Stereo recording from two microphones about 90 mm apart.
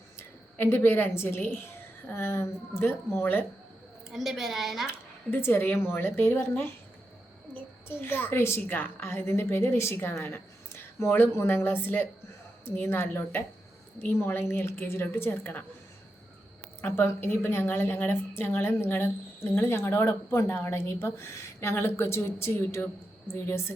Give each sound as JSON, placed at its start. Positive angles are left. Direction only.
{"t": 0.6, "sound": "a woman's voice", "side_deg": 25}
{"t": 4.1, "sound": "a woman's voice", "side_deg": -5}
{"t": 4.9, "sound": "a woman's voice", "side_deg": 25}
{"t": 16.8, "sound": "a woman's voice", "side_deg": 25}